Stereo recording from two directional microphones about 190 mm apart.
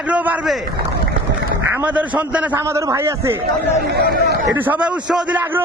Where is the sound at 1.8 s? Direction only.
10° right (ahead or behind).